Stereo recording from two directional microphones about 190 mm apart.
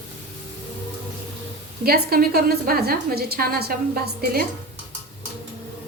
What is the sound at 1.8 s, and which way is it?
A woman's voice, 55° right (ahead or behind).